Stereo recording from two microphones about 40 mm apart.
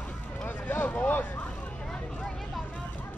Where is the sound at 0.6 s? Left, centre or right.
Left.